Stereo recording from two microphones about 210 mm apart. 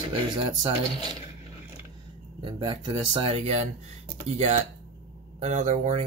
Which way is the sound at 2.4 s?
25° right (ahead or behind).